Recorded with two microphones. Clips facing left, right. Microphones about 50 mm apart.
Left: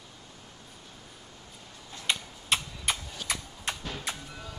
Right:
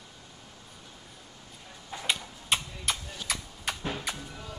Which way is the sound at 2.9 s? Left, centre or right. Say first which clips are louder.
Left 1 dB; centre.